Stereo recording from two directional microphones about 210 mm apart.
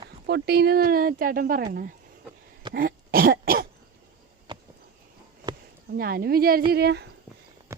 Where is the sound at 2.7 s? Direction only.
45° right (ahead or behind).